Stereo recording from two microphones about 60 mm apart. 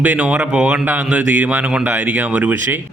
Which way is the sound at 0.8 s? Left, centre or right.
Right.